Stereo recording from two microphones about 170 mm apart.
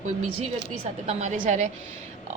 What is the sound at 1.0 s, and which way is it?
Speech, 45° right (ahead or behind).